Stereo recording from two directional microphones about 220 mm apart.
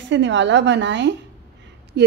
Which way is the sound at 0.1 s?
55° right (ahead or behind).